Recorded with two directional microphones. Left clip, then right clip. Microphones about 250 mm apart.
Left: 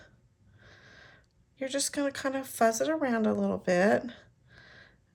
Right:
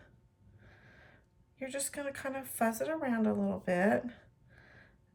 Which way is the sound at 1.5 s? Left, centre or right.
Left.